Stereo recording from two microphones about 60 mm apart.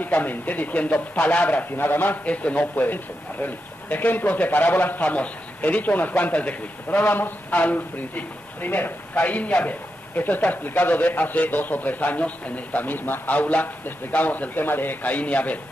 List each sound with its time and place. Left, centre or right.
0.0 s speech: left